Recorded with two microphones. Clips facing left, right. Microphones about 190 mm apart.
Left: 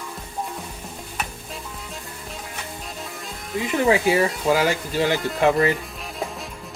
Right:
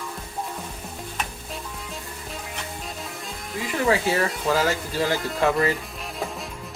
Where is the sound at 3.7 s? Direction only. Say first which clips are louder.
Left 3 dB; 15° left (ahead or behind).